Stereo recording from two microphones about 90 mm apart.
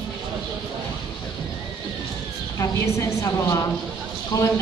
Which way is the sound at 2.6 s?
35° left (ahead or behind).